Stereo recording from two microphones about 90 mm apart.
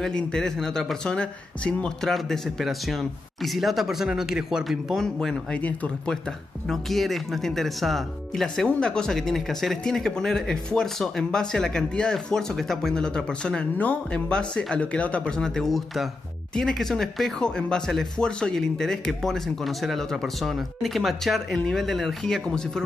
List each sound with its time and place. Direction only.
0.0 s speech: 10° left (ahead or behind)
5.6 s speech: 15° left (ahead or behind)
6.7 s speech: centre (ahead or behind)